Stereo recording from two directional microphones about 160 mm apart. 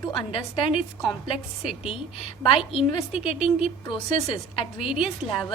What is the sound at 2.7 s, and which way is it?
A woman's voice, 35° left (ahead or behind).